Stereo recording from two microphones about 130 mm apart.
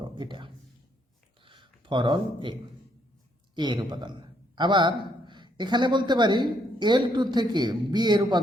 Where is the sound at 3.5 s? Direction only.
35° right (ahead or behind).